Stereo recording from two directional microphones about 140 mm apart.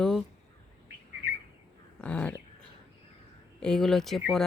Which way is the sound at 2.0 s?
10° left (ahead or behind).